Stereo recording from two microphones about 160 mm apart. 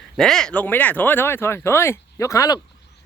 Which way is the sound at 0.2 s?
5° left (ahead or behind).